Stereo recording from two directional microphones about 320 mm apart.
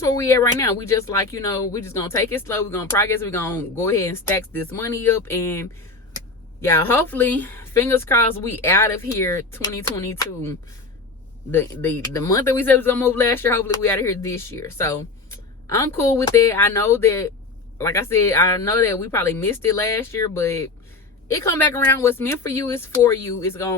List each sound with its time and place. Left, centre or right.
0.0 s speech: centre
11.5 s speech: centre